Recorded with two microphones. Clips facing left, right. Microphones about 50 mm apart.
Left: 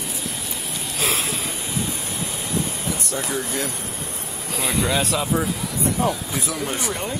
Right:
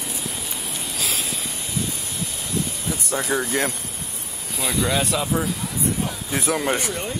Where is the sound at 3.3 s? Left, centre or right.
Right.